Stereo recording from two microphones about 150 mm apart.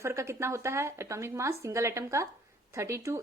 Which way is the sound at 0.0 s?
20° right (ahead or behind).